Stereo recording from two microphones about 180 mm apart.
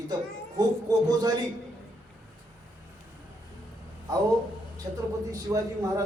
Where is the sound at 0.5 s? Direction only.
20° right (ahead or behind).